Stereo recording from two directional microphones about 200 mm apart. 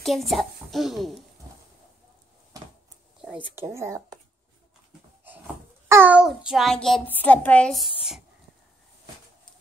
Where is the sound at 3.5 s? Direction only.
15° right (ahead or behind).